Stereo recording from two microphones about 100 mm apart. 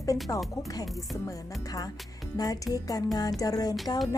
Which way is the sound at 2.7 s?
5° right (ahead or behind).